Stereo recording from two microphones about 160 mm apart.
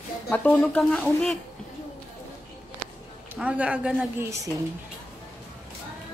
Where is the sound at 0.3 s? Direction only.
10° left (ahead or behind).